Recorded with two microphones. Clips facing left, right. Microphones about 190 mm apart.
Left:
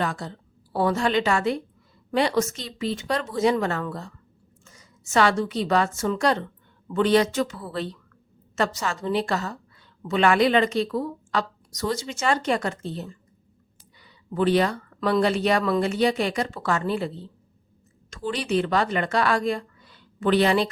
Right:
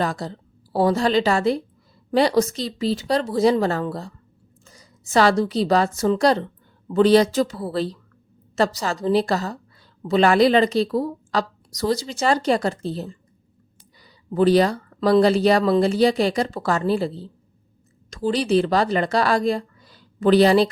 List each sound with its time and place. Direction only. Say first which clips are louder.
0.0 s a woman's voice: right 3 dB; 35° right (ahead or behind)